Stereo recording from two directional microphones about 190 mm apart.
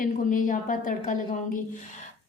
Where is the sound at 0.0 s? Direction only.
45° left (ahead or behind).